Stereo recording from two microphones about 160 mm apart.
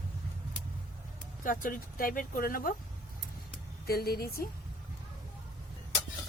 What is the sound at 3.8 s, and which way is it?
Speech, 75° left (ahead or behind).